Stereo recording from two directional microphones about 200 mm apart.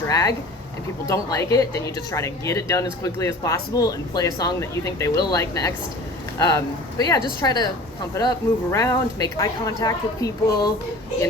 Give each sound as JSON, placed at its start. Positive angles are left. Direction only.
{"t": 0.1, "sound": "speech", "side_deg": 20}
{"t": 7.0, "sound": "a woman's voice", "side_deg": 20}